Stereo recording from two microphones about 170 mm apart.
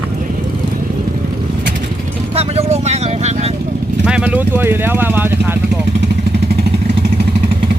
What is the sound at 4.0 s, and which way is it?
Speech, 5° right (ahead or behind).